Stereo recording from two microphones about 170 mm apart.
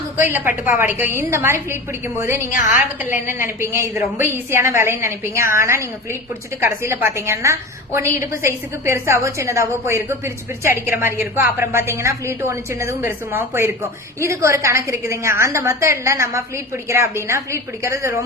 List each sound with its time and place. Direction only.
0.2 s a woman's voice: 15° right (ahead or behind)
2.5 s a woman's voice: 50° left (ahead or behind)
3.0 s a woman's voice: 15° right (ahead or behind)